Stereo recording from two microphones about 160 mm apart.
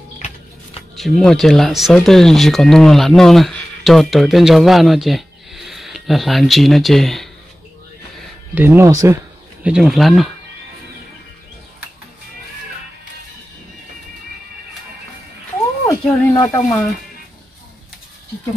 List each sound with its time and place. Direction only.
0.9 s speech: centre (ahead or behind)
8.5 s speech: 15° right (ahead or behind)
9.6 s speech: 5° right (ahead or behind)
15.9 s speech: 20° left (ahead or behind)